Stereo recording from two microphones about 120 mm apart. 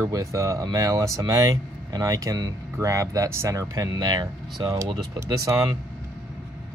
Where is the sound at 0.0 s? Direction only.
25° right (ahead or behind).